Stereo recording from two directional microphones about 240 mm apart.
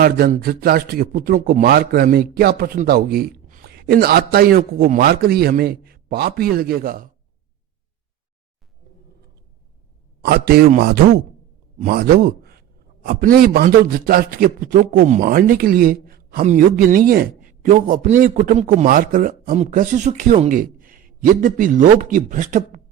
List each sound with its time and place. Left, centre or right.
0.0 s speech: right
10.2 s speech: right